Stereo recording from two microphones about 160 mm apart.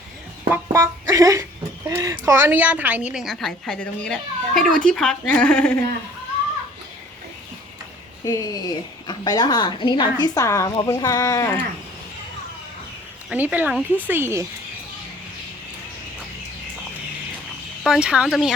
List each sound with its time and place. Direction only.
0.5 s music: 15° right (ahead or behind)
1.9 s a woman's voice: 20° right (ahead or behind); by 5.8 s 10° left (ahead or behind)
8.2 s a woman's voice: 20° left (ahead or behind)
13.3 s speech: 10° right (ahead or behind)
17.8 s a woman's voice: 5° right (ahead or behind)